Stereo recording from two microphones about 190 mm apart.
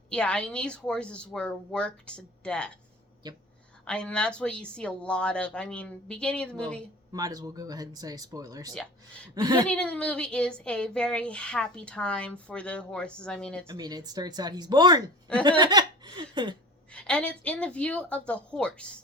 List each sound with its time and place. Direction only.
0.1 s speech: 5° left (ahead or behind)
3.2 s speech: 20° right (ahead or behind)
3.8 s speech: 5° left (ahead or behind)
7.1 s speech: 20° right (ahead or behind)
9.6 s speech: 5° left (ahead or behind)
13.7 s speech: 20° right (ahead or behind)
15.4 s a sound: 20° right (ahead or behind)
16.9 s speech: 5° left (ahead or behind)